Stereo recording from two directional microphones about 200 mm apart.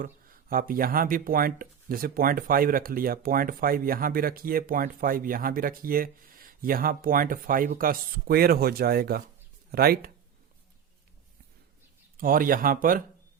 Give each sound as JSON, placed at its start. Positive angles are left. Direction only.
{"t": 0.0, "sound": "speech", "side_deg": -45}
{"t": 12.1, "sound": "speech", "side_deg": -45}